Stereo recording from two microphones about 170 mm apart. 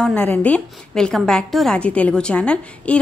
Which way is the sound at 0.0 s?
10° left (ahead or behind).